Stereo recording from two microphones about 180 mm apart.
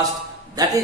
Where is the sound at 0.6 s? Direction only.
20° right (ahead or behind).